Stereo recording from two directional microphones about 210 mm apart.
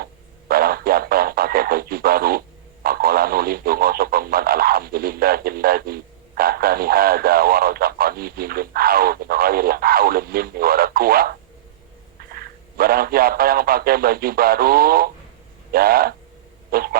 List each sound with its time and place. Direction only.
0.0 s radio: 45° right (ahead or behind)
2.8 s speech: 45° right (ahead or behind)